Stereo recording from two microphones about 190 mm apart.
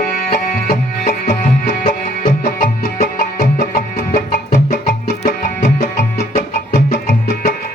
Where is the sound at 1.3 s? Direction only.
45° left (ahead or behind).